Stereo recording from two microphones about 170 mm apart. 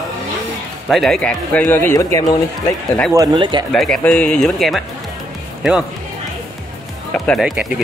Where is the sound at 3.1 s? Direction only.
25° right (ahead or behind).